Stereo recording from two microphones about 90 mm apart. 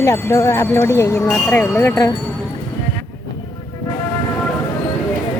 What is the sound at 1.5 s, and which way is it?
Speech, 25° left (ahead or behind).